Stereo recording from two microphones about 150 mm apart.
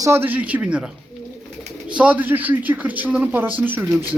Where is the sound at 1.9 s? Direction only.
10° right (ahead or behind).